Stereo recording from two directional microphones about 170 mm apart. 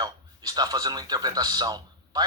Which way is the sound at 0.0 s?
25° right (ahead or behind).